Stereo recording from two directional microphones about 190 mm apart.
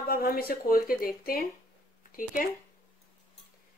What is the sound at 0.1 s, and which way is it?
Speech, 50° left (ahead or behind).